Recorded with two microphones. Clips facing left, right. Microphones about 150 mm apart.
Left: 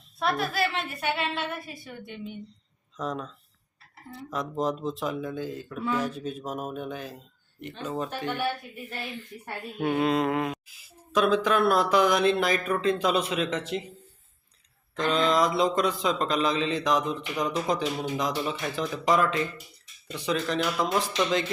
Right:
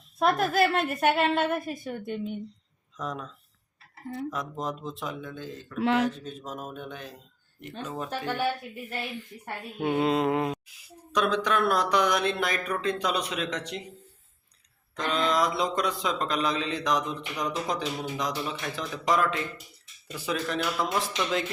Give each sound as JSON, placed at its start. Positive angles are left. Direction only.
{"t": 0.2, "sound": "a woman's voice", "side_deg": -45}
{"t": 3.0, "sound": "a man's voice", "side_deg": 0}
{"t": 9.7, "sound": "mantra", "side_deg": -20}
{"t": 10.7, "sound": "a man's voice", "side_deg": 5}
{"t": 14.9, "sound": "a man's voice", "side_deg": 0}